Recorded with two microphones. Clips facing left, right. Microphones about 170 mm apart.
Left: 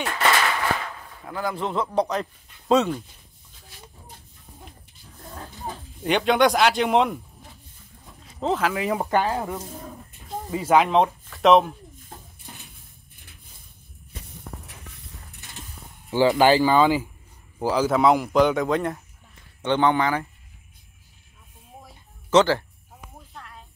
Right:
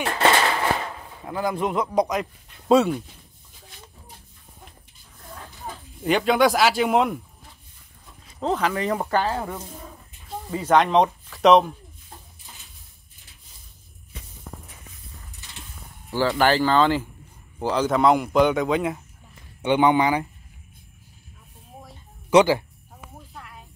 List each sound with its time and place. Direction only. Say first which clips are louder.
0.0 s a sound: right 3 dB; 30° right (ahead or behind)
2.0 s speech: right 1 dB; 10° right (ahead or behind)
6.0 s speech: even; centre (ahead or behind)
8.4 s speech: even; centre (ahead or behind)
16.1 s speech: left 3 dB; 15° left (ahead or behind); by 19.0 s centre (ahead or behind)
19.6 s speech: right 2 dB; 15° right (ahead or behind)
22.3 s speech: right 2 dB; 10° right (ahead or behind)
23.3 s a sound: left 1 dB; 5° right (ahead or behind)